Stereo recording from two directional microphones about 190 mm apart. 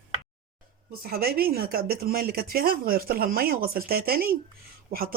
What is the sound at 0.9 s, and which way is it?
Speech, 55° right (ahead or behind).